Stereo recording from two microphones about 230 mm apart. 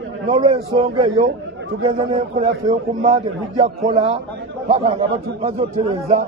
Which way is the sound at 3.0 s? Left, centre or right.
Right.